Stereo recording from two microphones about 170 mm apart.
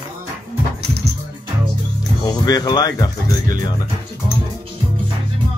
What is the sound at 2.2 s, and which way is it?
Speech, 25° left (ahead or behind).